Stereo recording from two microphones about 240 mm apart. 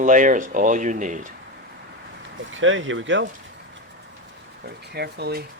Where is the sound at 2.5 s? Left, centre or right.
Right.